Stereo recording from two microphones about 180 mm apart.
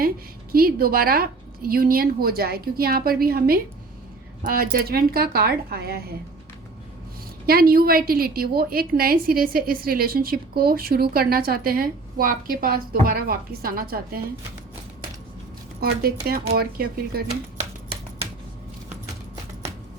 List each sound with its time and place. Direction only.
0.5 s a woman's voice: 55° right (ahead or behind)
7.4 s a woman's voice: 55° right (ahead or behind)
16.2 s a woman's voice: 60° right (ahead or behind)